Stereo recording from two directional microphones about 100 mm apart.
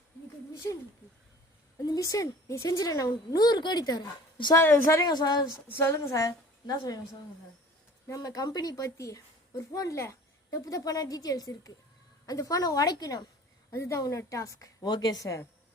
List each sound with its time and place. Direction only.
1.8 s speech: 40° left (ahead or behind)
4.5 s a woman's voice: 25° left (ahead or behind)
4.9 s a woman's voice: 40° left (ahead or behind)
5.7 s speech: 25° left (ahead or behind)
8.0 s speech: 35° left (ahead or behind)
15.2 s speech: 30° left (ahead or behind)